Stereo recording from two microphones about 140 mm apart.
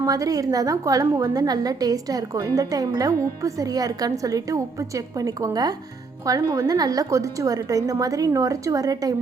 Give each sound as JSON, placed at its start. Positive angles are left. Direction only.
{"t": 0.0, "sound": "a woman's voice", "side_deg": -25}